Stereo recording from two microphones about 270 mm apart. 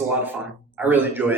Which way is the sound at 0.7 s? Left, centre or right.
Centre.